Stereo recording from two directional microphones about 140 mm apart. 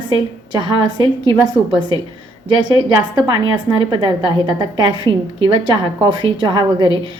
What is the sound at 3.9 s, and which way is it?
A woman's voice, 30° right (ahead or behind).